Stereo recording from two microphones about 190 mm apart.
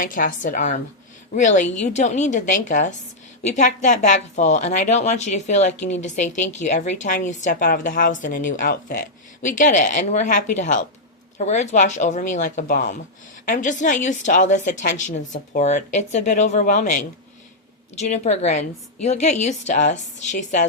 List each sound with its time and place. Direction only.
0.0 s a woman's voice: 45° left (ahead or behind)